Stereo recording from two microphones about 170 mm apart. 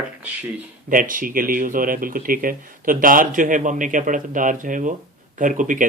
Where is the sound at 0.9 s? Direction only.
55° right (ahead or behind).